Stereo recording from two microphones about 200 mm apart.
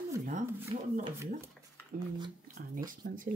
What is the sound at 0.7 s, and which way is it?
Speech, 30° right (ahead or behind).